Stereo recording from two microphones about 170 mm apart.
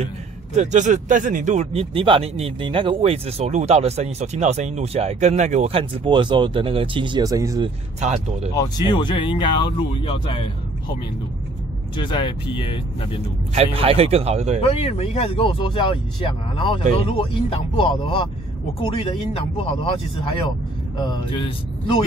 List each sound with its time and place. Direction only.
0.6 s speech: 45° right (ahead or behind); by 7.7 s 20° right (ahead or behind)
8.0 s speech: 40° right (ahead or behind)
8.5 s speech: 25° left (ahead or behind)
12.0 s speech: 30° left (ahead or behind)
13.7 s speech: 35° right (ahead or behind)
14.6 s speech: 35° left (ahead or behind)